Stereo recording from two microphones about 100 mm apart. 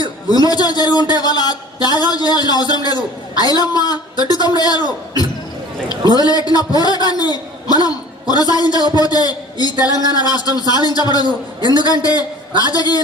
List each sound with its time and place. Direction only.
0.3 s a man's voice: 40° left (ahead or behind)
5.9 s a man's voice: 40° left (ahead or behind)